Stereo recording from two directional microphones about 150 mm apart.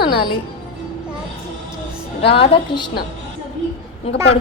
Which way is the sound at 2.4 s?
35° left (ahead or behind).